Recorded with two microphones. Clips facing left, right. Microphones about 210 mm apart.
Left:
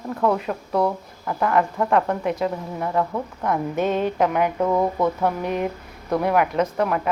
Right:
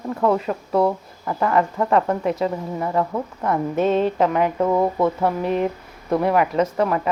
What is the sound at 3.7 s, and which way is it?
Speech, 30° right (ahead or behind).